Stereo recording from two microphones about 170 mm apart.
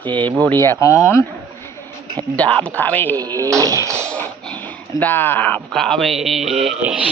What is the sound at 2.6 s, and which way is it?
Speech, 10° left (ahead or behind).